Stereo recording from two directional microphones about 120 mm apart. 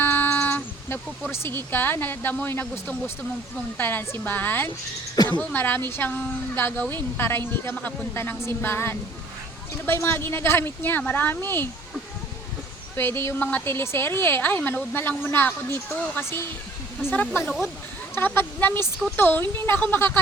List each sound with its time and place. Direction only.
0.0 s a sound: 15° left (ahead or behind)
1.3 s a woman's voice: 20° left (ahead or behind)
13.0 s a woman's voice: 20° left (ahead or behind)
17.1 s a woman's voice: 15° left (ahead or behind)